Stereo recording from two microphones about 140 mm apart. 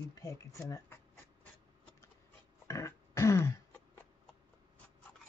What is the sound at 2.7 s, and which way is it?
Throat clearing, 20° left (ahead or behind).